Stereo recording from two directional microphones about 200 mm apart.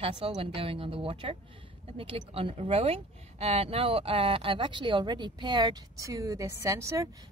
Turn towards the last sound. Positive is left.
turn(degrees=-15)  # may be behind; listen again after turning